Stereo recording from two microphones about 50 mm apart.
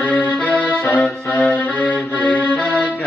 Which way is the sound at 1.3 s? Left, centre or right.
Left.